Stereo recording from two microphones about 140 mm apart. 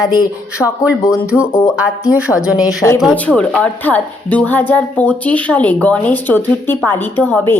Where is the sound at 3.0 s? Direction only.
5° left (ahead or behind).